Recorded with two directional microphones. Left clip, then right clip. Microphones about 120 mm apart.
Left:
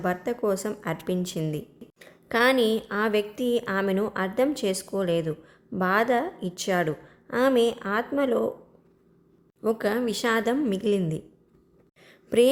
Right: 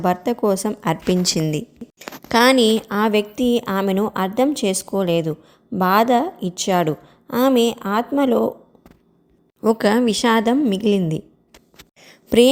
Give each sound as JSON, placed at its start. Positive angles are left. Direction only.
{"t": 0.0, "sound": "speech", "side_deg": -40}
{"t": 9.7, "sound": "speech", "side_deg": -60}
{"t": 10.0, "sound": "a woman's voice", "side_deg": -45}
{"t": 11.9, "sound": "a sound", "side_deg": -35}